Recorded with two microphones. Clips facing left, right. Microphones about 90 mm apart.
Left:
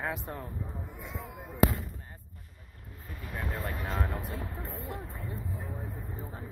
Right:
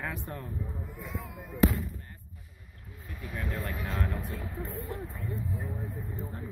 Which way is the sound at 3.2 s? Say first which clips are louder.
Even; centre (ahead or behind).